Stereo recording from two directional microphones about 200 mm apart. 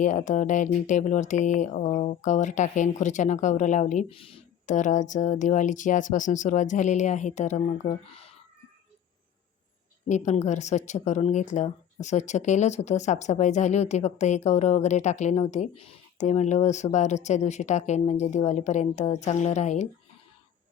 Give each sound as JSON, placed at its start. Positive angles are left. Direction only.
{"t": 0.0, "sound": "speech", "side_deg": 40}
{"t": 10.1, "sound": "speech", "side_deg": 35}